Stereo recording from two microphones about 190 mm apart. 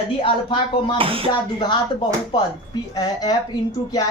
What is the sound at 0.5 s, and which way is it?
Speech, 25° left (ahead or behind).